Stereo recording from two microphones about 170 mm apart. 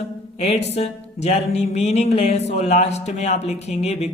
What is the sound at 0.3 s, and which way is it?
A man's voice, 40° left (ahead or behind).